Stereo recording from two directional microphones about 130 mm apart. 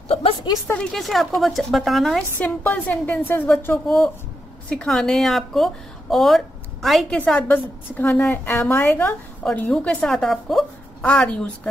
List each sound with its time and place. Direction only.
0.1 s a woman's voice: 45° left (ahead or behind)
0.7 s a woman's voice: 5° left (ahead or behind)
2.3 s a woman's voice: 15° left (ahead or behind)
4.6 s a woman's voice: 5° left (ahead or behind)
7.2 s a woman's voice: 10° left (ahead or behind)